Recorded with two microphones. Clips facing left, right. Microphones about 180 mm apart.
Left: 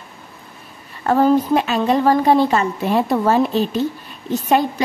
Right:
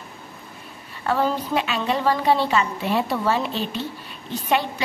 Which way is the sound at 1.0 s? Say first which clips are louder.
Left 8 dB; 45° left (ahead or behind).